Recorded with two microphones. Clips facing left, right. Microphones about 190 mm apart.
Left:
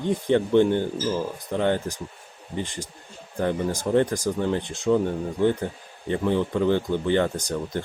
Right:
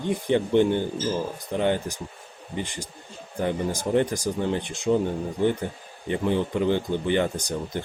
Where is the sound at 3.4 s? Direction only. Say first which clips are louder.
Left 1 dB; 15° right (ahead or behind).